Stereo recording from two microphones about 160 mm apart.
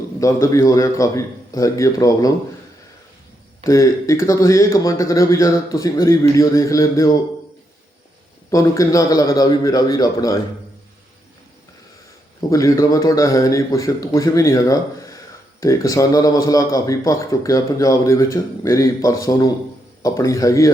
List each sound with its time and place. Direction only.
0.2 s a man's voice: 20° left (ahead or behind)
3.7 s a man's voice: 20° left (ahead or behind)
8.4 s a man's voice: 20° left (ahead or behind)
12.4 s a man's voice: 20° left (ahead or behind)